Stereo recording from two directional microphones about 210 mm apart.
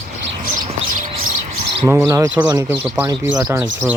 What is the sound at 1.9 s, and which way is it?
Speech, 15° right (ahead or behind).